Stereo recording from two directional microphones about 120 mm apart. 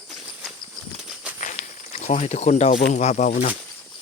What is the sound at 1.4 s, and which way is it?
Snake, 75° left (ahead or behind).